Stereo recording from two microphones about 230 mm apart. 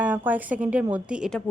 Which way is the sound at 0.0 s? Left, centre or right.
Centre.